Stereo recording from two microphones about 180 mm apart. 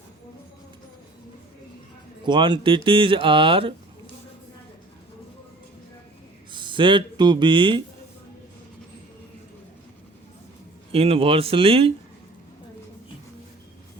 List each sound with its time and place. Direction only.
2.2 s speech: 25° right (ahead or behind)
6.5 s speech: 25° right (ahead or behind)
10.9 s speech: 30° right (ahead or behind)